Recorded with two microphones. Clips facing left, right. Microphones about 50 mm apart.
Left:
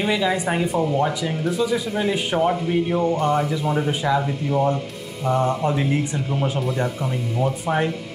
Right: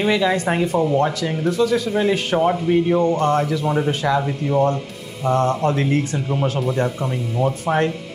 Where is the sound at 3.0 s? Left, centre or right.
Centre.